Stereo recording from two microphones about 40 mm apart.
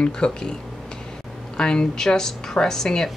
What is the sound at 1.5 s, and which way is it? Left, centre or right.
Speech, left.